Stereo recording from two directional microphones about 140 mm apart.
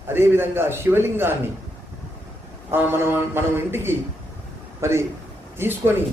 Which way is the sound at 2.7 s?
15° right (ahead or behind).